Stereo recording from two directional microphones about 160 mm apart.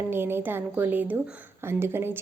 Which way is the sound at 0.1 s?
15° right (ahead or behind).